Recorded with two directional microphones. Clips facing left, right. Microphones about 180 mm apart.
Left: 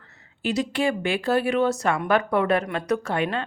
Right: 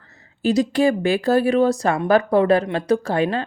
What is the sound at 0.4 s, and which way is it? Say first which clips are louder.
Speech: right 6 dB; 40° right (ahead or behind).